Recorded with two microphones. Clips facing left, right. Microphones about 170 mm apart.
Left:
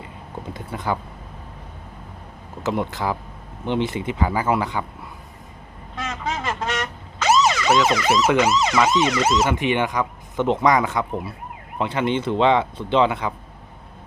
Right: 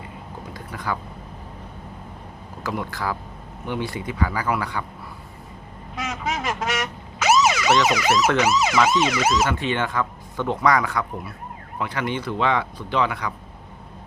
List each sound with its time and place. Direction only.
0.5 s a sound: 25° left (ahead or behind)
2.6 s speech: 20° left (ahead or behind)
6.0 s emergency vehicle: 10° right (ahead or behind)
9.3 s speech: 20° left (ahead or behind)